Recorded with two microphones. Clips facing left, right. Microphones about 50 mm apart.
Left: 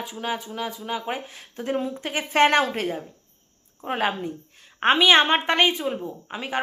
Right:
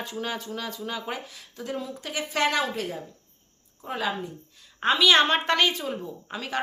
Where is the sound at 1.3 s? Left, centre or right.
Left.